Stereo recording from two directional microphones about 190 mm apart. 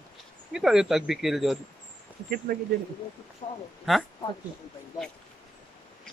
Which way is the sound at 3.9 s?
Centre (ahead or behind).